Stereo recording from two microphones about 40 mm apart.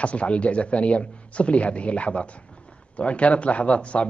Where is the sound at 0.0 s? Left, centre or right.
Left.